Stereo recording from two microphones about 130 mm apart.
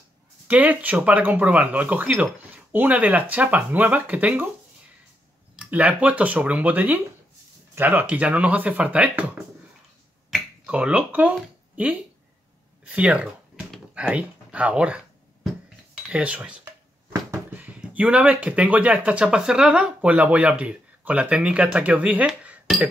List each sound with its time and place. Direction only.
0.5 s speech: 10° right (ahead or behind)
5.6 s speech: 10° right (ahead or behind)
12.8 s a sound: 10° right (ahead or behind)
13.9 s speech: 10° right (ahead or behind)
16.1 s speech: 10° right (ahead or behind)
17.1 s a sound: 25° right (ahead or behind)
17.6 s speech: 10° right (ahead or behind)